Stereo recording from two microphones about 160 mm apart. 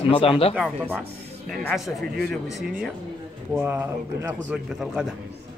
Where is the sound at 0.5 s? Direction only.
10° right (ahead or behind).